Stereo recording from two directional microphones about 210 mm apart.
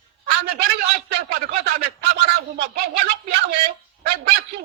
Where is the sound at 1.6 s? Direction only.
50° right (ahead or behind).